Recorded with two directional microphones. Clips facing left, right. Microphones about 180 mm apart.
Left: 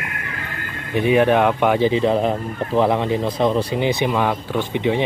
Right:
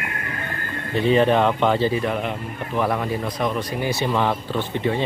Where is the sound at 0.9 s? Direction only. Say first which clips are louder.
Left 2 dB; 15° left (ahead or behind).